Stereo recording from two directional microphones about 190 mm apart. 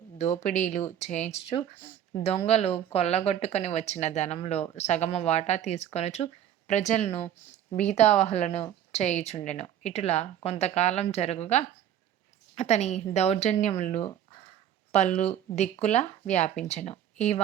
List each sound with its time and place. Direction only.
0.2 s speech: 35° left (ahead or behind)